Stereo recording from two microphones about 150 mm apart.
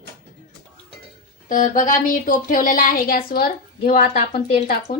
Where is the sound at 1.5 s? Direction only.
60° left (ahead or behind); by 4.2 s 80° left.